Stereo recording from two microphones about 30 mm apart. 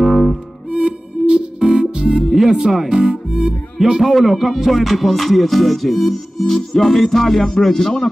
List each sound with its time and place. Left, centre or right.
0.0 s music: centre
0.7 s music: right
2.2 s music: centre
2.9 s music: right
4.0 s music: centre
7.4 s speech: centre